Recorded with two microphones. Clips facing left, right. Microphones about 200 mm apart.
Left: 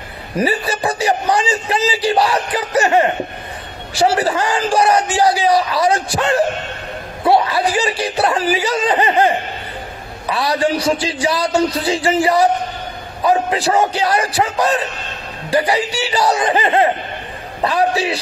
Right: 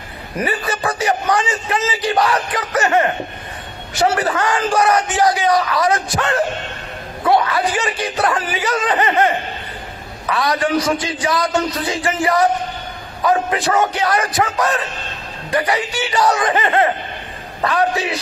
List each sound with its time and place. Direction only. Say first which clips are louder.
0.4 s a man's voice: left 3 dB; 30° left (ahead or behind)